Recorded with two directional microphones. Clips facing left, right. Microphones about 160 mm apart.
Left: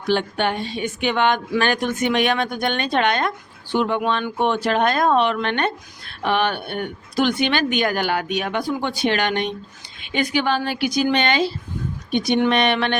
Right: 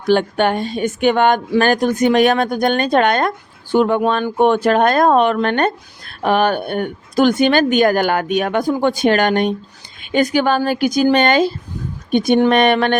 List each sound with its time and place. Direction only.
0.1 s speech: 50° right (ahead or behind)